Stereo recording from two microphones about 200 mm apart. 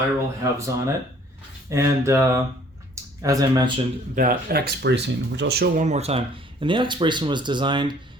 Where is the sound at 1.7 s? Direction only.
15° right (ahead or behind).